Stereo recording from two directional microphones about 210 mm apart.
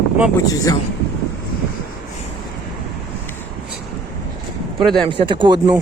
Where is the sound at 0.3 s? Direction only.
15° left (ahead or behind).